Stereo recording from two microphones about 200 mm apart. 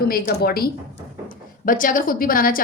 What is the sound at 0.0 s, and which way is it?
A woman's voice, 50° left (ahead or behind).